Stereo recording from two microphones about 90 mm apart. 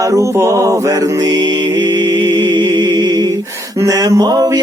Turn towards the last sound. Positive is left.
turn(degrees=-45)  # may be behind; listen again after turning